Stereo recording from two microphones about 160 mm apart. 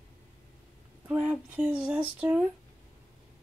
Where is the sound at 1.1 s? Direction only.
5° right (ahead or behind).